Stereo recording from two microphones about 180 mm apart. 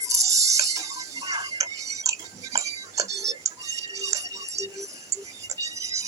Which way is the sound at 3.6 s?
15° right (ahead or behind).